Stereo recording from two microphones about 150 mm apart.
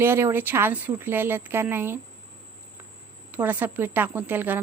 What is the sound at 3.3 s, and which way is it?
A woman's voice, 10° right (ahead or behind).